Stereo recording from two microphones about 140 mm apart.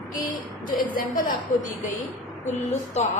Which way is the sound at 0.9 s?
85° left.